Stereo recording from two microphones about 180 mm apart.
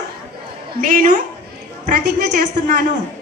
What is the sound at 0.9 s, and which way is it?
Speech, 40° right (ahead or behind).